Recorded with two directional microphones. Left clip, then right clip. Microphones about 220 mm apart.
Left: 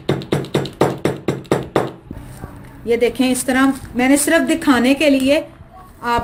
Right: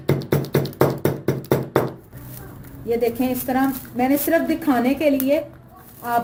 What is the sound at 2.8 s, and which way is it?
A woman's voice, 45° left (ahead or behind).